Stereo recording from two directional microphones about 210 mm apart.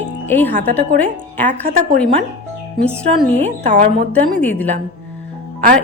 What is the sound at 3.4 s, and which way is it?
Speech, 30° right (ahead or behind).